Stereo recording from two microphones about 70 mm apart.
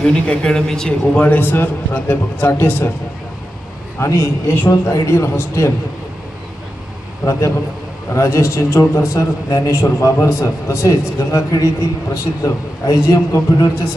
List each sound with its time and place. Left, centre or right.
0.0 s speech: centre; by 2.9 s left
4.0 s a man's voice: left
8.1 s a man's voice: left